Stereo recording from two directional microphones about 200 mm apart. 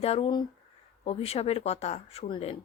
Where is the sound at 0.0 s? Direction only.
30° left (ahead or behind).